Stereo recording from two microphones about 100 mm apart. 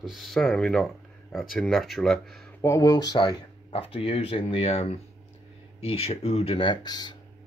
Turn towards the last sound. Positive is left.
turn(degrees=45)  # may be behind; listen again after turning